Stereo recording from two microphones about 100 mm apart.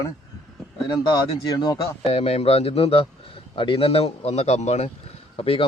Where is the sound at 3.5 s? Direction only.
60° left (ahead or behind); by 4.9 s 90° left.